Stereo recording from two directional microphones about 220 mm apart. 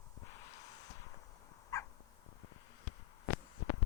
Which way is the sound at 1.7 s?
15° left (ahead or behind).